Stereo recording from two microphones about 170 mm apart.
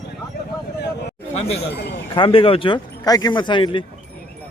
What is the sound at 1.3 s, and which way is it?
Speech, 35° left (ahead or behind).